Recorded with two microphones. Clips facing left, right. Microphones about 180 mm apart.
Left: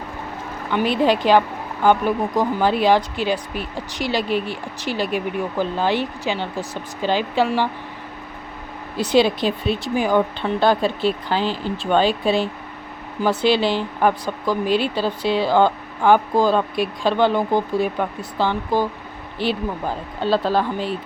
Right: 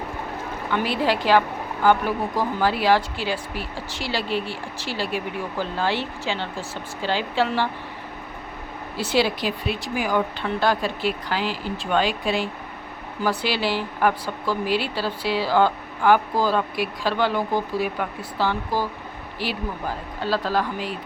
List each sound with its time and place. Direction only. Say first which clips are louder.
0.7 s speech: left 5 dB; 20° left (ahead or behind)
9.0 s speech: left 5 dB; 20° left (ahead or behind)